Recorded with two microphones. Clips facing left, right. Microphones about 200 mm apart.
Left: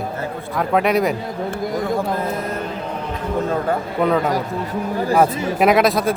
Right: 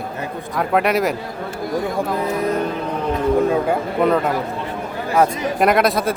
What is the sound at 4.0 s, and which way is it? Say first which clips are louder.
Speech: even; centre (ahead or behind).